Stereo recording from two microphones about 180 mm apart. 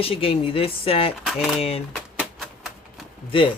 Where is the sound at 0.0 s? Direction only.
30° left (ahead or behind).